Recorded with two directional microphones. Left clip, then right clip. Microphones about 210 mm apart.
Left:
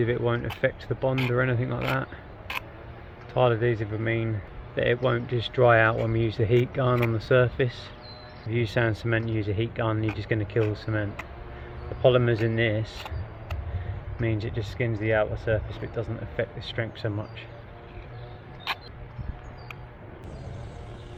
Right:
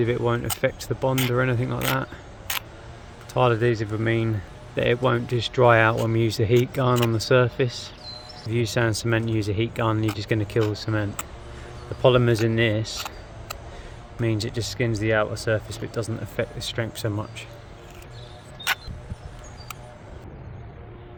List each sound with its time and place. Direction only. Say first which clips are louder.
0.0 s speech: right 2 dB; 30° right (ahead or behind)
3.3 s speech: right 2 dB; 35° right (ahead or behind)
12.8 s typing: right 6 dB; 15° right (ahead or behind)
14.2 s speech: right 4 dB; 35° right (ahead or behind)